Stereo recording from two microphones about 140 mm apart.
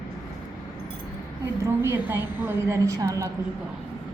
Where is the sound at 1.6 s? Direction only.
20° right (ahead or behind).